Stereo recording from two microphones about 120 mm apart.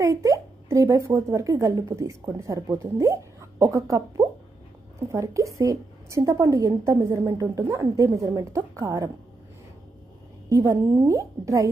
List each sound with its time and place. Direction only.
0.0 s speech: 25° right (ahead or behind)
10.5 s speech: 25° right (ahead or behind)